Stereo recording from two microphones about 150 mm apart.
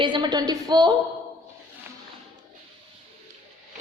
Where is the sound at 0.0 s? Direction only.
30° right (ahead or behind).